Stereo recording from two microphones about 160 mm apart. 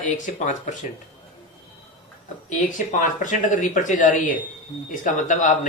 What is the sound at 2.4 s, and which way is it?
Speech, 50° left (ahead or behind).